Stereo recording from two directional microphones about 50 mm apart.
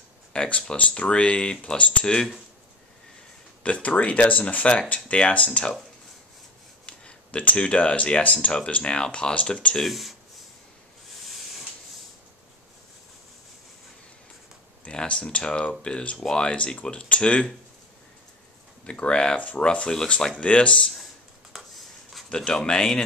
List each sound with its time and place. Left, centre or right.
0.3 s speech: centre
3.6 s speech: left
6.9 s speech: left
9.8 s speech: centre
11.1 s a sound: centre
14.9 s speech: centre
18.9 s speech: left
21.5 s a sound: centre
22.3 s speech: centre